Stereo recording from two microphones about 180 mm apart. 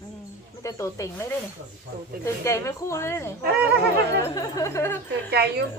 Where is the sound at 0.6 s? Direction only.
15° left (ahead or behind).